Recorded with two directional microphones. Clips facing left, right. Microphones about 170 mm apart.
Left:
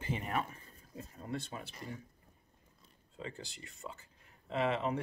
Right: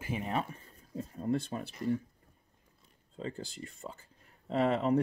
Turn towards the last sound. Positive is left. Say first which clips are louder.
# right 5 dB
turn(degrees=-40)  # may be behind; listen again after turning